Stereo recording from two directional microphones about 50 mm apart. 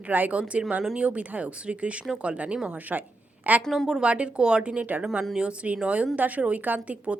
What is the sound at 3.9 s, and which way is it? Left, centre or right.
A woman's voice, right.